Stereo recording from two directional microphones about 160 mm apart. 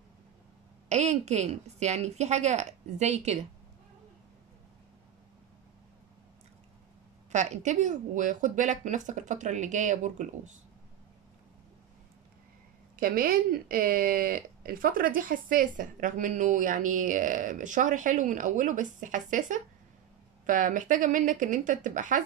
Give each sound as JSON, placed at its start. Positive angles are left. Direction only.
{"t": 0.8, "sound": "speech", "side_deg": -45}
{"t": 7.3, "sound": "speech", "side_deg": -50}
{"t": 13.0, "sound": "speech", "side_deg": -65}